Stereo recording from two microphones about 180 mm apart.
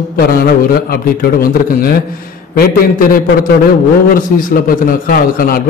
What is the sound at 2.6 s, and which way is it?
Speech, 50° left (ahead or behind).